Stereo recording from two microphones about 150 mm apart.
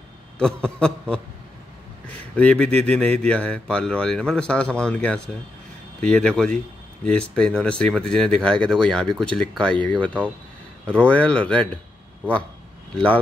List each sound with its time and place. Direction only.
0.4 s a man's voice: 5° left (ahead or behind)
2.3 s speech: 10° left (ahead or behind)